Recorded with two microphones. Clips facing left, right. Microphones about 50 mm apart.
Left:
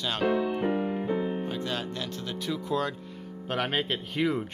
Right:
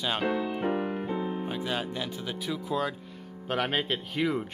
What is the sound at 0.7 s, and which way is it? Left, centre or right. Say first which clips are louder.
Music: left 1 dB; centre.